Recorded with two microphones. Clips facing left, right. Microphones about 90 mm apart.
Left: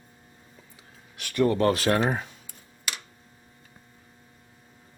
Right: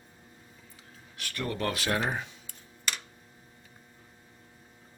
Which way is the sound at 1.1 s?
15° left (ahead or behind).